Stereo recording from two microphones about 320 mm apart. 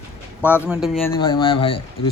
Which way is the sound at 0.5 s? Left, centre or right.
Centre.